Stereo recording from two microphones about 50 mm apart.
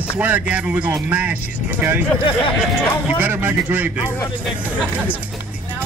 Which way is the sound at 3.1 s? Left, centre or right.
Right.